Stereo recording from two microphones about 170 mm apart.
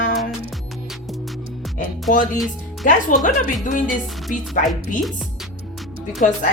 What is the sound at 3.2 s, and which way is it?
Speech, 50° left (ahead or behind).